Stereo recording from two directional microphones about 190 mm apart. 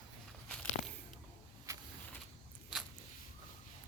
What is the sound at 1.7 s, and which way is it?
Vehicle, 15° right (ahead or behind).